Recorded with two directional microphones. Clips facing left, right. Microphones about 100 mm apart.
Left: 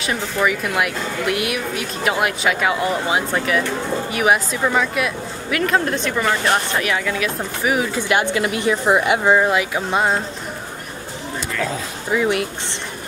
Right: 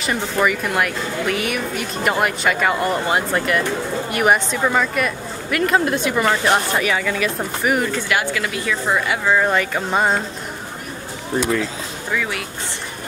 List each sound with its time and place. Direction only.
0.0 s a woman's voice: centre (ahead or behind)
8.1 s a woman's voice: 25° left (ahead or behind)
9.5 s a woman's voice: 5° left (ahead or behind)
12.1 s a woman's voice: 25° left (ahead or behind)